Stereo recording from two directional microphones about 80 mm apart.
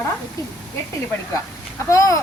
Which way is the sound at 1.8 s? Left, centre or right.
Left.